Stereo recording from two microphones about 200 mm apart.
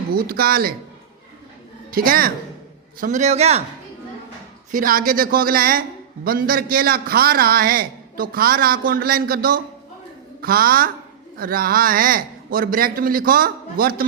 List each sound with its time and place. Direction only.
0.1 s a man's voice: 50° right (ahead or behind)
1.9 s a woman's voice: 45° right (ahead or behind)
4.7 s a man's voice: 45° right (ahead or behind)